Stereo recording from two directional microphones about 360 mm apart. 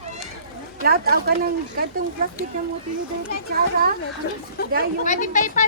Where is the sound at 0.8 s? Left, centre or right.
Right.